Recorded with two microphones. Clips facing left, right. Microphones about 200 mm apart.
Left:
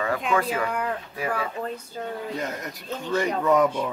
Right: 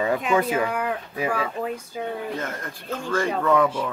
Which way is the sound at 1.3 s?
10° right (ahead or behind).